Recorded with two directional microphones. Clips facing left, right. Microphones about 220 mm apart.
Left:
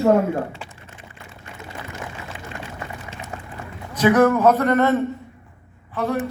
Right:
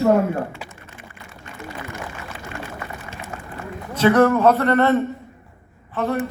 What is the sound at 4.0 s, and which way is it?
Speech, 10° left (ahead or behind).